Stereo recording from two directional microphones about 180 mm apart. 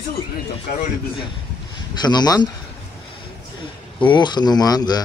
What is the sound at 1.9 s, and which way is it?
Speech, 25° left (ahead or behind).